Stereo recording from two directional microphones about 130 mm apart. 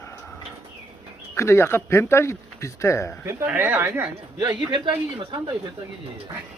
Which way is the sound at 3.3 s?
20° right (ahead or behind).